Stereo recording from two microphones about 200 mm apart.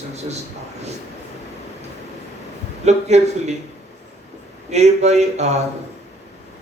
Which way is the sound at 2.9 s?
35° right (ahead or behind).